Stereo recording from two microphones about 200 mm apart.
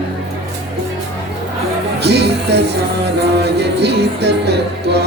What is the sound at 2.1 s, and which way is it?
Music, 55° right (ahead or behind).